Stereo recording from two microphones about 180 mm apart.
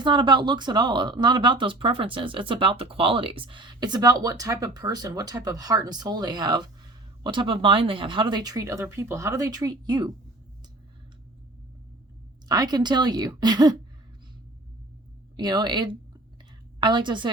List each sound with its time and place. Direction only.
0.0 s speech: 25° right (ahead or behind)
12.5 s speech: 20° right (ahead or behind)
15.4 s speech: 20° right (ahead or behind)